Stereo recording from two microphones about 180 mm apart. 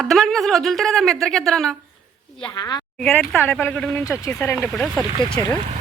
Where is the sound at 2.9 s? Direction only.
5° left (ahead or behind).